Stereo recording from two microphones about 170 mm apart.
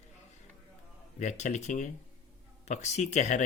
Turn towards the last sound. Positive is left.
turn(degrees=45)  # may be behind; listen again after turning